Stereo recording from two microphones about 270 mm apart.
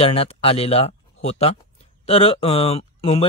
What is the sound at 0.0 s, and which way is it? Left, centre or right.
Speech, left.